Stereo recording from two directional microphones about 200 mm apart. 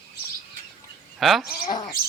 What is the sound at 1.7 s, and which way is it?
Chicken, 20° left (ahead or behind).